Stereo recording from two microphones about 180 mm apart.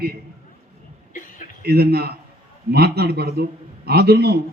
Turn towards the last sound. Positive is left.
turn(degrees=-60)  # may be behind; listen again after turning